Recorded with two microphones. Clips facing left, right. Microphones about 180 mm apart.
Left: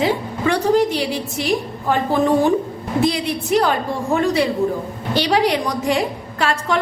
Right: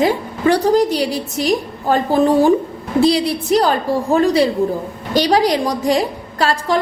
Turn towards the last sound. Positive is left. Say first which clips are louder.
# right 3 dB
turn(degrees=-35)  # may be behind; listen again after turning